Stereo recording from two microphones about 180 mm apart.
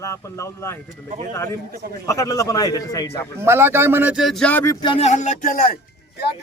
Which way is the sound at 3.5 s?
10° right (ahead or behind).